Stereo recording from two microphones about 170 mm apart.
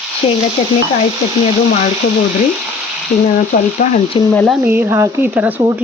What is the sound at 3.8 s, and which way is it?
Speech, 45° left (ahead or behind).